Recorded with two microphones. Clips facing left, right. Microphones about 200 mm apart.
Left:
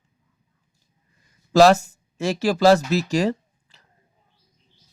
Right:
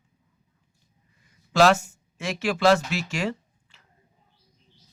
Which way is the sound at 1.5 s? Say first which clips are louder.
Left 5 dB; 40° left (ahead or behind).